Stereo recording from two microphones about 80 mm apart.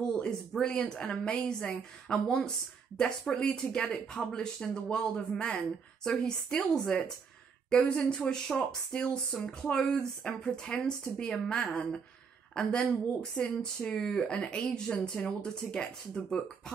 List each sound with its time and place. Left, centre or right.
0.0 s speech: centre